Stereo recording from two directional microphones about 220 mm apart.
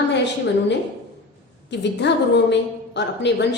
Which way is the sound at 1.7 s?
50° left (ahead or behind).